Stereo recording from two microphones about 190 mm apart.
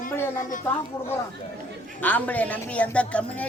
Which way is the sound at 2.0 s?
10° left (ahead or behind).